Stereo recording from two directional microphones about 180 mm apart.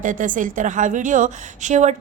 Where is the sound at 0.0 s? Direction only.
45° right (ahead or behind).